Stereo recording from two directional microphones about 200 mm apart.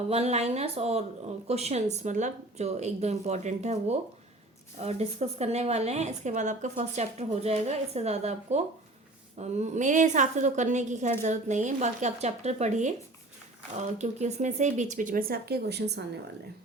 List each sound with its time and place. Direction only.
0.1 s speech: 30° right (ahead or behind); by 16.0 s 55° right (ahead or behind)